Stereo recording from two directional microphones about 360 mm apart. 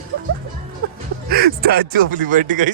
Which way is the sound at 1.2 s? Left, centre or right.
Right.